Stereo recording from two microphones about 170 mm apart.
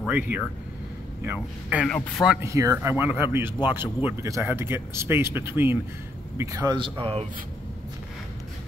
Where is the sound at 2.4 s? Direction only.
20° right (ahead or behind).